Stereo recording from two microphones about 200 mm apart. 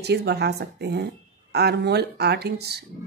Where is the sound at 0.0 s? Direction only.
55° right (ahead or behind).